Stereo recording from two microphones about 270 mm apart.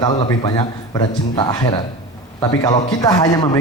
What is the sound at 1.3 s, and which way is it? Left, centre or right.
Speech, centre.